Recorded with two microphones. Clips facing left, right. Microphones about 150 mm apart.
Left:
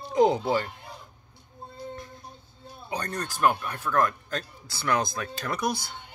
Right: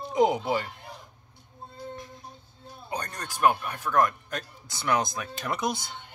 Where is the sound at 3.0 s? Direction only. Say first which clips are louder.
Even; 15° right (ahead or behind).